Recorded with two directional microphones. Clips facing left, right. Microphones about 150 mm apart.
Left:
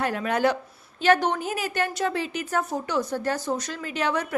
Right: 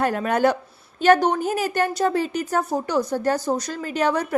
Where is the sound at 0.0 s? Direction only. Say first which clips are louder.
Right 4 dB; 45° right (ahead or behind).